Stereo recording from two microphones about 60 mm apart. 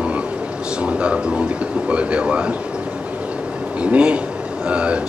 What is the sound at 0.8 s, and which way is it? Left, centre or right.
A man's voice, centre.